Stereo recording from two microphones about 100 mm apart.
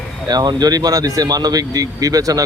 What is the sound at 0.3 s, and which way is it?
Speech, 40° right (ahead or behind).